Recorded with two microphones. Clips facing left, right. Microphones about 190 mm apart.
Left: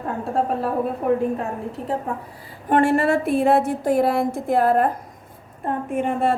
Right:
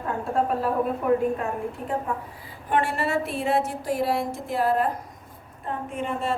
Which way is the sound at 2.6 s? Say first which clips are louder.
Left 7 dB; 50° left (ahead or behind).